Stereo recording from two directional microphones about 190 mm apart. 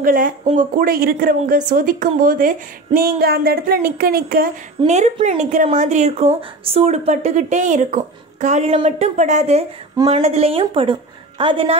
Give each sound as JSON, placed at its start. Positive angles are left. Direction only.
{"t": 0.0, "sound": "speech", "side_deg": -50}
{"t": 4.8, "sound": "a woman's voice", "side_deg": -35}